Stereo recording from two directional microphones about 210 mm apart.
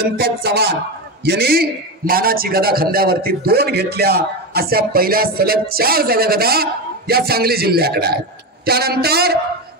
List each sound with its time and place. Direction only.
0.0 s a man's voice: 50° right (ahead or behind)